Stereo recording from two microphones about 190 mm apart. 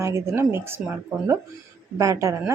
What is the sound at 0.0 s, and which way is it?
Speech, 15° right (ahead or behind).